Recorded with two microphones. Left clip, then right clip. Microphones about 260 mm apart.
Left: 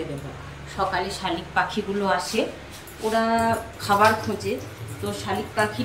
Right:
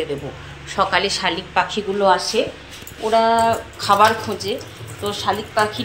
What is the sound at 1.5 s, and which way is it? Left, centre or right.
Speech, centre.